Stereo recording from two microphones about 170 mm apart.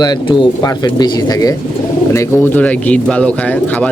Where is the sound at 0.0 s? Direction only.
25° left (ahead or behind).